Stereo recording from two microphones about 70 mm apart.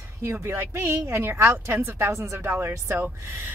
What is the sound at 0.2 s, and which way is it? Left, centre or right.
A woman's voice, right.